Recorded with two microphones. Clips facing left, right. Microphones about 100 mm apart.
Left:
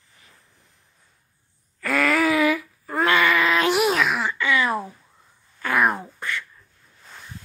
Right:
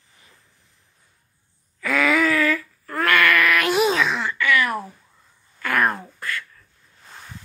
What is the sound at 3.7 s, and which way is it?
Groan, 5° left (ahead or behind).